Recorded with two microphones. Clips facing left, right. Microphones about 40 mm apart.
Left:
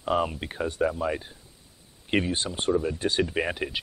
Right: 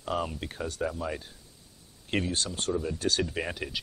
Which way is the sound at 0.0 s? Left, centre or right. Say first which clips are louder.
Left 6 dB; left.